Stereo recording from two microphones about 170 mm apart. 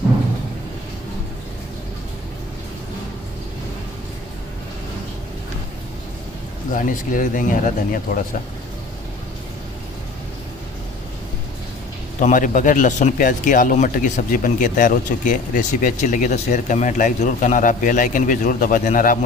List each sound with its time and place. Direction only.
6.7 s speech: 50° left (ahead or behind)
12.2 s speech: 50° left (ahead or behind)